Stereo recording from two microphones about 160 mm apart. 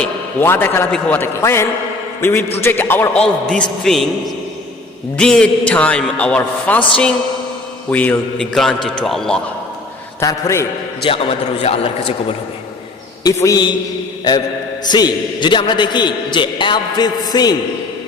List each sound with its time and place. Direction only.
0.0 s a man's voice: 15° left (ahead or behind)
5.1 s a man's voice: 5° left (ahead or behind)
7.9 s a man's voice: 10° left (ahead or behind)
10.2 s a man's voice: 20° left (ahead or behind)
11.0 s a man's voice: 35° left (ahead or behind)
13.2 s a man's voice: 25° left (ahead or behind)
14.8 s a man's voice: 25° left (ahead or behind)